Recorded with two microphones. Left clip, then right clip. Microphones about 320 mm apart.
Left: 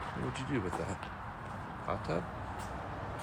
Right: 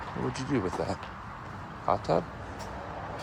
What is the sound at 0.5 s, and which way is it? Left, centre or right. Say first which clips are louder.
Speech: right 7 dB; centre.